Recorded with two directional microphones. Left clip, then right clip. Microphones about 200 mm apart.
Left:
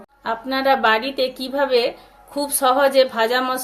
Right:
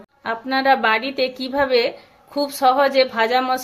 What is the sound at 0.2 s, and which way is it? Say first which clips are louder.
A woman's voice: right 1 dB; 20° right (ahead or behind).